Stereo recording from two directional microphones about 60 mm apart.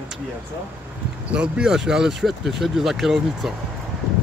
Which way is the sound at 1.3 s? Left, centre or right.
Centre.